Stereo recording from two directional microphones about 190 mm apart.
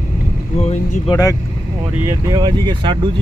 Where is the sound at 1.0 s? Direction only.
15° left (ahead or behind).